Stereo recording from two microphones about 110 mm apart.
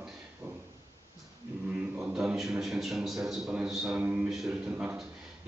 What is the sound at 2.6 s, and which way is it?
A man's voice, centre (ahead or behind).